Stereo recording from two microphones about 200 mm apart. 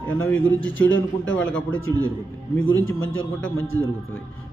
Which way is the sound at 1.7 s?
80° left.